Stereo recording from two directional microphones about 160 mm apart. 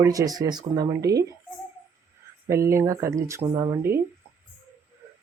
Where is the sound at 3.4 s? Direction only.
35° right (ahead or behind).